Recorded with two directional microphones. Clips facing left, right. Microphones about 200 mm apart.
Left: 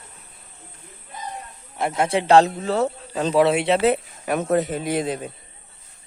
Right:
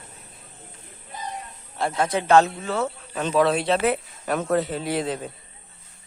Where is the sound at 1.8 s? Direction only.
20° left (ahead or behind).